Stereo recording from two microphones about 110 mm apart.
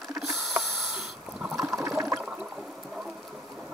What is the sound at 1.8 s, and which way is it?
Toilet flush, 25° right (ahead or behind).